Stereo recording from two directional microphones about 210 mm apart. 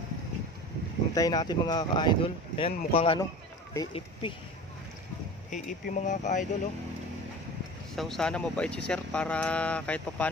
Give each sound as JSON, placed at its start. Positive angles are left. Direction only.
{"t": 1.1, "sound": "speech", "side_deg": 15}
{"t": 5.5, "sound": "speech", "side_deg": 40}
{"t": 7.9, "sound": "speech", "side_deg": 0}